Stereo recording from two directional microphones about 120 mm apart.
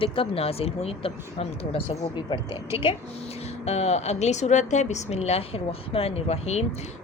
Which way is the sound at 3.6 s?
65° left (ahead or behind).